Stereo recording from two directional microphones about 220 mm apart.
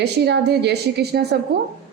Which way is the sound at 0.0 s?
50° right (ahead or behind).